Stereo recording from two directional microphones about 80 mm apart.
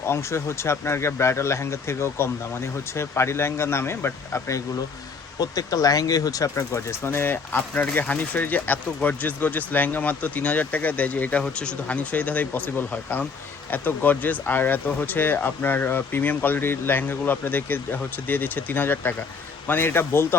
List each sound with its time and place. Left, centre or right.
0.0 s speech: left
5.4 s speech: left